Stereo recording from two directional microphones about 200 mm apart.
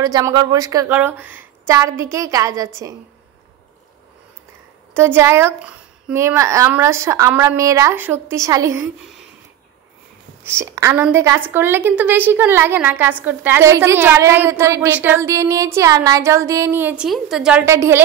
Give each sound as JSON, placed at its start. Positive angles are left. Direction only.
{"t": 0.0, "sound": "a woman's voice", "side_deg": -20}
{"t": 4.9, "sound": "a woman's voice", "side_deg": -10}
{"t": 10.4, "sound": "a woman's voice", "side_deg": -15}